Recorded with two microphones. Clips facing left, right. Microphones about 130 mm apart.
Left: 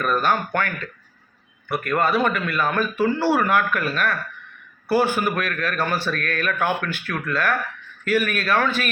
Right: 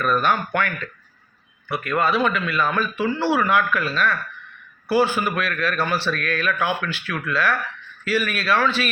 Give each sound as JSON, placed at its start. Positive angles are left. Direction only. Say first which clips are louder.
{"t": 0.0, "sound": "a man's voice", "louder": "right 1 dB", "side_deg": 40}
{"t": 1.7, "sound": "a man's voice", "louder": "left 1 dB", "side_deg": 45}